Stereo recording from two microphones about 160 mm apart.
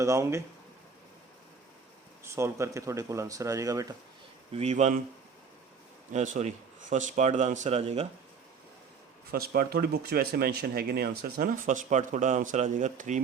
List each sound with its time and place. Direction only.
0.0 s speech: 20° right (ahead or behind)
2.3 s speech: 20° right (ahead or behind)
4.5 s speech: 45° right (ahead or behind)
6.1 s speech: 50° right (ahead or behind)
9.3 s speech: 70° right (ahead or behind); by 13.2 s 50° right (ahead or behind)